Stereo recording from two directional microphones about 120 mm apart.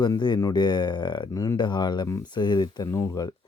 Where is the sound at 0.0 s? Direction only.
40° left (ahead or behind).